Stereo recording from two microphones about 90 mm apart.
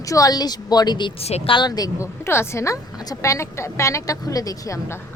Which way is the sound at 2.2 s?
30° left (ahead or behind).